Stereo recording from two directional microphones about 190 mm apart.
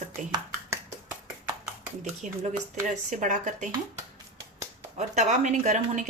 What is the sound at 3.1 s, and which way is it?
Speech, 40° right (ahead or behind).